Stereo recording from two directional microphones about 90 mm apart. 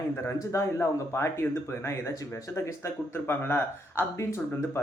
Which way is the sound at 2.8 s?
25° left (ahead or behind).